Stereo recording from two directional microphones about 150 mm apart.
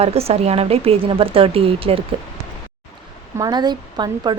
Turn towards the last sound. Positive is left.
turn(degrees=-30)  # may be behind; listen again after turning